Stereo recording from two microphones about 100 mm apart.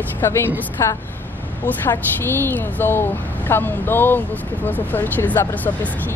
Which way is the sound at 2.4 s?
20° left (ahead or behind).